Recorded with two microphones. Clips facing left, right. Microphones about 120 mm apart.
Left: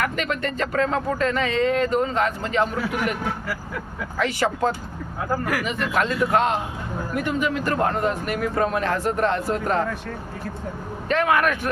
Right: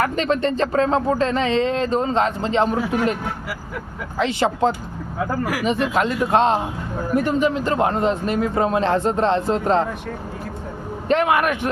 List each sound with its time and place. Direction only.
0.0 s speech: 30° right (ahead or behind)
4.2 s speech: 20° right (ahead or behind)
11.1 s speech: 20° right (ahead or behind)